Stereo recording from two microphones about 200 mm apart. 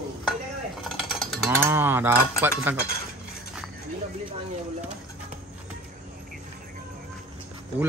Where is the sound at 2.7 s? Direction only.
10° right (ahead or behind).